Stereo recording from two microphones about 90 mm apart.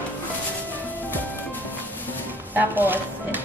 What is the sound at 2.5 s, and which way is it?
Speech, 20° right (ahead or behind).